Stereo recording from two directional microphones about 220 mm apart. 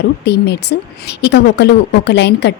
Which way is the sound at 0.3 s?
50° left (ahead or behind).